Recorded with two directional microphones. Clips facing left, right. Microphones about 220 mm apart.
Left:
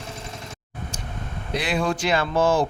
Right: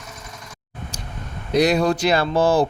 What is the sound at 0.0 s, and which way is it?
Vehicle, 30° left (ahead or behind).